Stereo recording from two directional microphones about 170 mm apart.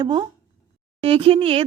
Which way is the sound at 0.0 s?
25° right (ahead or behind).